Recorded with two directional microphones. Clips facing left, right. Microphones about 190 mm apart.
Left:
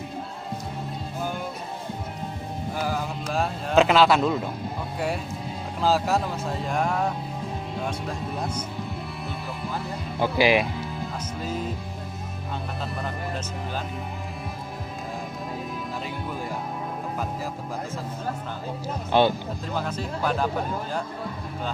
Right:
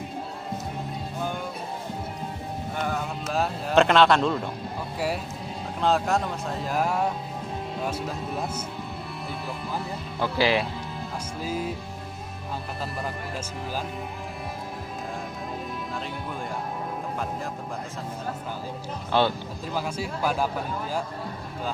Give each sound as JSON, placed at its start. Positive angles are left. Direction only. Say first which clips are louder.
{"t": 2.8, "sound": "speech", "louder": "left 1 dB", "side_deg": 5}
{"t": 5.8, "sound": "speech", "louder": "left 1 dB", "side_deg": 0}
{"t": 10.2, "sound": "speech", "louder": "left 3 dB", "side_deg": 15}
{"t": 11.4, "sound": "speech", "louder": "right 1 dB", "side_deg": -5}
{"t": 19.1, "sound": "speech", "louder": "left 3 dB", "side_deg": 15}
{"t": 19.7, "sound": "speech", "louder": "even", "side_deg": -10}